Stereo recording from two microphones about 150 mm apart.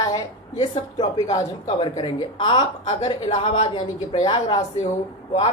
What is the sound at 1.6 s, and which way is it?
Speech, 35° left (ahead or behind).